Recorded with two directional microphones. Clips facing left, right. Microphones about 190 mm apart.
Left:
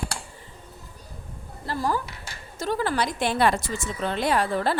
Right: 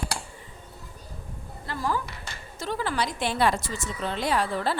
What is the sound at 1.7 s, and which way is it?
A woman's voice, 40° left (ahead or behind).